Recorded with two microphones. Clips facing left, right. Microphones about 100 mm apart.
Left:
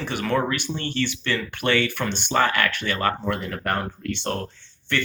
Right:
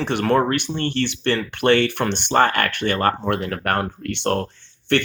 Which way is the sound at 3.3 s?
65° right (ahead or behind).